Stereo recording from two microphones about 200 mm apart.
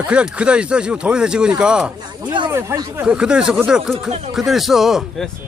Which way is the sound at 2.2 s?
20° right (ahead or behind).